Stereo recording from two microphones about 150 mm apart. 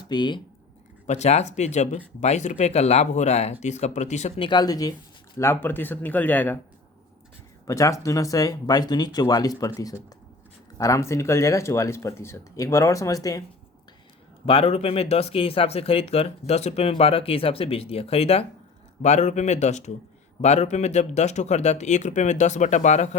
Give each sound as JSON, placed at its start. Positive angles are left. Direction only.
{"t": 0.0, "sound": "speech", "side_deg": 30}
{"t": 1.0, "sound": "speech", "side_deg": 50}
{"t": 4.4, "sound": "speech", "side_deg": 30}
{"t": 7.7, "sound": "speech", "side_deg": 20}
{"t": 14.4, "sound": "speech", "side_deg": 40}